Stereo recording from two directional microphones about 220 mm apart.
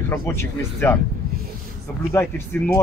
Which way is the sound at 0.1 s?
10° left (ahead or behind).